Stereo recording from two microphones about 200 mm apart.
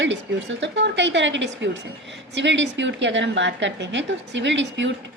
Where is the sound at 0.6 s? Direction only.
60° right (ahead or behind).